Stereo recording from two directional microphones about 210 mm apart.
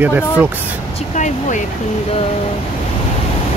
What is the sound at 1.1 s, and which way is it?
Speech, 35° left (ahead or behind).